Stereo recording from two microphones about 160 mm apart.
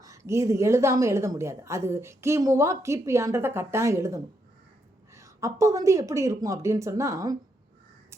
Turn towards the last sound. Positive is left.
turn(degrees=-20)  # may be behind; listen again after turning